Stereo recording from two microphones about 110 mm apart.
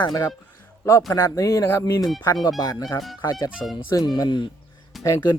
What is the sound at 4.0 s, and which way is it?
Speech, 40° left (ahead or behind).